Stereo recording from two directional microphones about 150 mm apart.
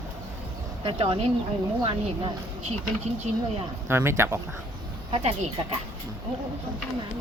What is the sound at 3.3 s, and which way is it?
Speech, 45° right (ahead or behind).